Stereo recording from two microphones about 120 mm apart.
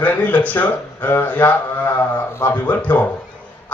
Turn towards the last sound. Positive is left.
turn(degrees=10)  # may be behind; listen again after turning